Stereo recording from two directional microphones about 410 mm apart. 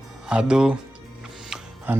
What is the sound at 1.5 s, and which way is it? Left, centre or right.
Music, centre.